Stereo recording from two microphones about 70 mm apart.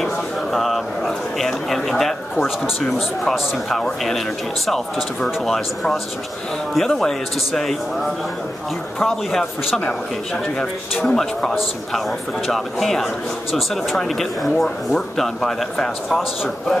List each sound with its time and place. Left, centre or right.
0.0 s a sound: centre
4.6 s speech: centre
11.1 s a man's voice: centre